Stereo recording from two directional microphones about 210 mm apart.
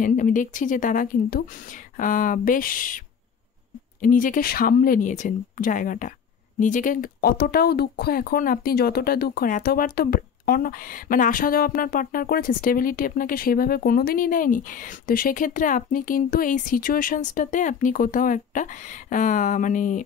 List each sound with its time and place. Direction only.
0.0 s speech: 40° left (ahead or behind)
4.0 s speech: 40° left (ahead or behind)